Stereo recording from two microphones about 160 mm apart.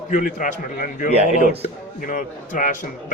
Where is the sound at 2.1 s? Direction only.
55° left (ahead or behind).